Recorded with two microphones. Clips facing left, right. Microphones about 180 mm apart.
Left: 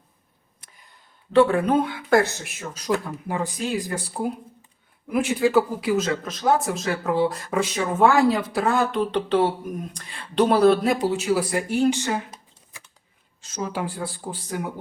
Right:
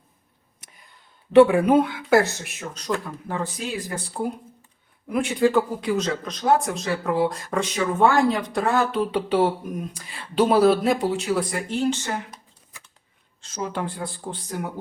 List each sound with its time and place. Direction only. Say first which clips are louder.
1.3 s speech: right 3 dB; 15° right (ahead or behind); by 11.9 s 10° left (ahead or behind)
13.4 s speech: even; 5° left (ahead or behind)